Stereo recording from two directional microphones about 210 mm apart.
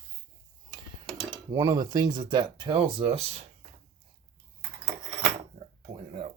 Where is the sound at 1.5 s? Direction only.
20° right (ahead or behind).